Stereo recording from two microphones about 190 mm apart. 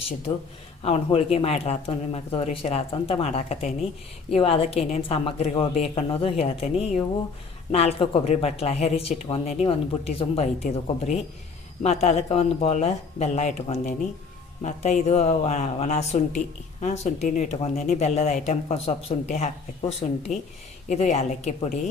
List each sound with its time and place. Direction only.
0.8 s speech: 30° left (ahead or behind)